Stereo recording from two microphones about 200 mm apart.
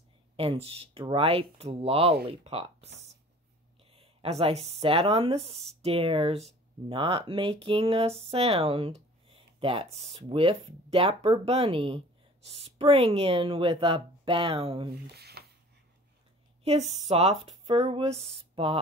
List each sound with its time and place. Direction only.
0.4 s speech: 30° right (ahead or behind)
3.9 s speech: 30° right (ahead or behind)
15.0 s a sound: 55° right (ahead or behind)
17.1 s speech: 30° right (ahead or behind)